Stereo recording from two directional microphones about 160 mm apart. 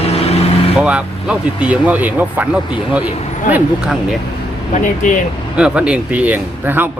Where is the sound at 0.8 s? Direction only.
5° right (ahead or behind).